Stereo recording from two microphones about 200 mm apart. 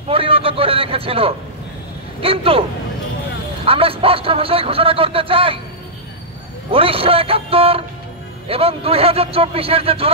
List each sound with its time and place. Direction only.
0.1 s a man's voice: 30° right (ahead or behind)
3.6 s a man's voice: 25° right (ahead or behind)
6.7 s a man's voice: 30° right (ahead or behind)